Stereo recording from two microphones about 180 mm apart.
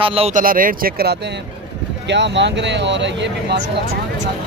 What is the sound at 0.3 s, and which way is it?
Speech, 50° right (ahead or behind).